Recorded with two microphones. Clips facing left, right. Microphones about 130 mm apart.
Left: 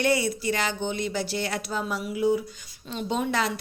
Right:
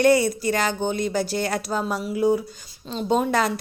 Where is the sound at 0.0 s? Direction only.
45° right (ahead or behind).